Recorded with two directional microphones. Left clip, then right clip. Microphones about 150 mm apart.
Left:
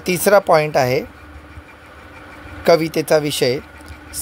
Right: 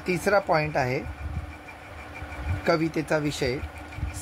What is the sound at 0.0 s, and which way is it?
Speech, 90° left.